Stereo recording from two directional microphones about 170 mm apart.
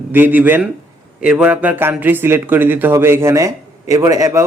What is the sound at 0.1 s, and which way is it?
A man's voice, 10° right (ahead or behind).